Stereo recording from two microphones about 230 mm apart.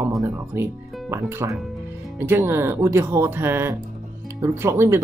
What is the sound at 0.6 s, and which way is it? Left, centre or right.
Speech, centre.